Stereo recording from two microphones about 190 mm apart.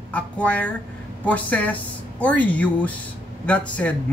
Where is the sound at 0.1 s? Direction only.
5° left (ahead or behind).